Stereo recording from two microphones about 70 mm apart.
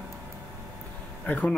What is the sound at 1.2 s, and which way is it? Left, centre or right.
Speech, left.